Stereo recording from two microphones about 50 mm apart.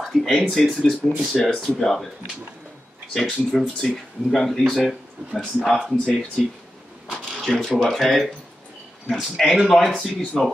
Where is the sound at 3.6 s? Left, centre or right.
Centre.